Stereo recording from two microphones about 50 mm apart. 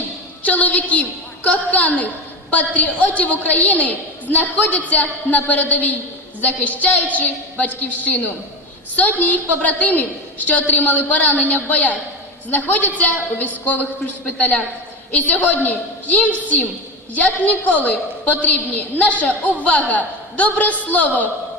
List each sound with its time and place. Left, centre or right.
0.4 s a woman's voice: left
17.4 s a woman's voice: left